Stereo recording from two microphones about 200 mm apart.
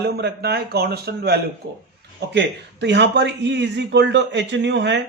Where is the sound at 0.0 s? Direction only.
55° right (ahead or behind).